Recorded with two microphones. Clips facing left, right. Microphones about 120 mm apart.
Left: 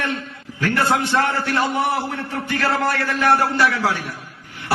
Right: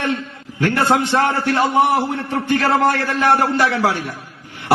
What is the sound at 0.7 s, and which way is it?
A man's voice, 20° right (ahead or behind).